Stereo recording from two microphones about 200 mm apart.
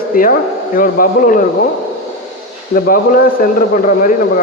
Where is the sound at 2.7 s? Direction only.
45° left (ahead or behind).